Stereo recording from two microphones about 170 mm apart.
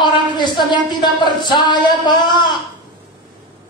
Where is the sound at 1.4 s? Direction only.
25° left (ahead or behind).